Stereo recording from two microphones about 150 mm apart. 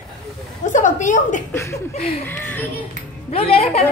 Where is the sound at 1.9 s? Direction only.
40° left (ahead or behind).